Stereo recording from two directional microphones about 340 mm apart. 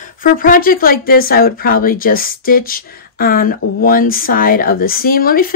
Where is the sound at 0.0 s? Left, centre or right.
Left.